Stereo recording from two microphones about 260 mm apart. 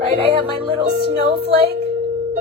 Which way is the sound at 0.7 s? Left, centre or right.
Right.